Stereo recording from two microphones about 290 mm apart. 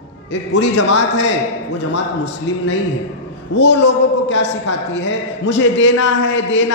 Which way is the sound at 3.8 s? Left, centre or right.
Left.